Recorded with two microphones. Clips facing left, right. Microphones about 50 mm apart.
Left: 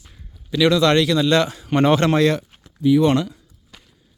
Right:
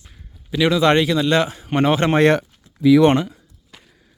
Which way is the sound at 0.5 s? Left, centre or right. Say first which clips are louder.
Even; centre.